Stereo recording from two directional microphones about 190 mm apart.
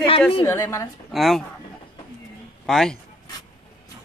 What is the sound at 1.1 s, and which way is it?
Speech, centre (ahead or behind).